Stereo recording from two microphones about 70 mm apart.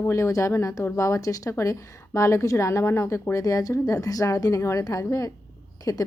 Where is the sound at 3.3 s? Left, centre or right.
Left.